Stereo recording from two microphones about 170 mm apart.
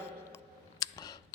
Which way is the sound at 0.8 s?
20° left (ahead or behind).